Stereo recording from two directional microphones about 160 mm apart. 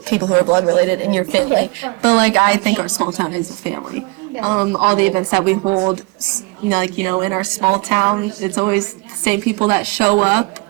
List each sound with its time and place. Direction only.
0.1 s a woman's voice: 20° right (ahead or behind)
3.0 s a woman's voice: 25° right (ahead or behind)
4.8 s a woman's voice: 15° right (ahead or behind)
5.4 s a woman's voice: 25° right (ahead or behind)
6.7 s a woman's voice: 15° right (ahead or behind)